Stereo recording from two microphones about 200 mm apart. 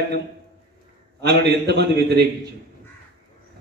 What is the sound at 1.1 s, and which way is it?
A man's voice, 55° right (ahead or behind).